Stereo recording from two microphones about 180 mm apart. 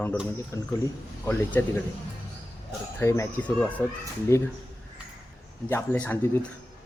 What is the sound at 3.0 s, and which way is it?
Speech, 15° left (ahead or behind).